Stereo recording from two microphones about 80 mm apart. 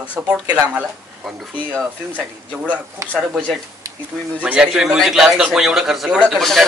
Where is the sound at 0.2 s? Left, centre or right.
Right.